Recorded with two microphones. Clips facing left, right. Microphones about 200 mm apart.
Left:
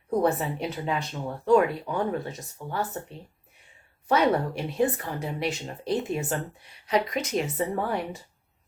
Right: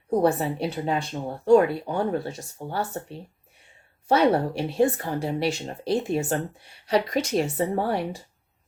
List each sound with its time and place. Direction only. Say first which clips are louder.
0.1 s speech: right 3 dB; 30° right (ahead or behind)
4.1 s speech: right 3 dB; 30° right (ahead or behind)